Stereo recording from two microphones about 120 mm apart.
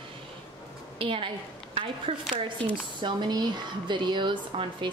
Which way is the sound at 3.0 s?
40° right (ahead or behind).